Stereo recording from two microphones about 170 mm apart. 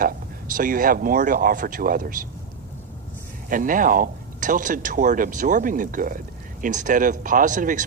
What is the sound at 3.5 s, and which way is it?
Speech, 55° right (ahead or behind).